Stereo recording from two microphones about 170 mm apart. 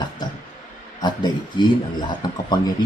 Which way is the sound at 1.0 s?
25° left (ahead or behind).